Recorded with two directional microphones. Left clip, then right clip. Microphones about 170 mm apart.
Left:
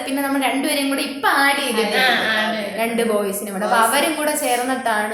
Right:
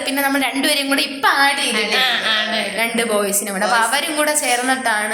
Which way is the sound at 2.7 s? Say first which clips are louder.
Even; 15° right (ahead or behind).